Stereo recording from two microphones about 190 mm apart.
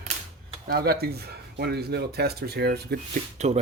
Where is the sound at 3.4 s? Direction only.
35° right (ahead or behind).